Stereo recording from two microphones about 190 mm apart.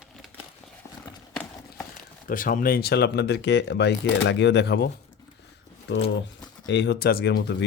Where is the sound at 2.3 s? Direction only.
45° left (ahead or behind).